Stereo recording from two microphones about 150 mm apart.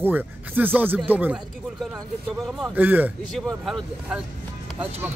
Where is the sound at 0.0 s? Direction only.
10° right (ahead or behind).